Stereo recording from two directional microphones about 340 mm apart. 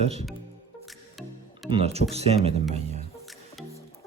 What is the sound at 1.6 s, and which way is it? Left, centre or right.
Speech, centre.